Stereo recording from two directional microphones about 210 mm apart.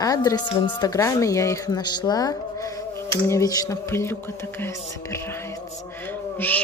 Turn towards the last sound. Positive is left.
turn(degrees=10)  # may be behind; listen again after turning